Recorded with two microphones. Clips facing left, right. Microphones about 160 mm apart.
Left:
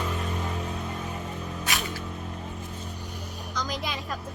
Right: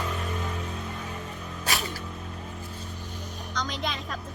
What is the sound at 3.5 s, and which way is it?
Music, 5° left (ahead or behind).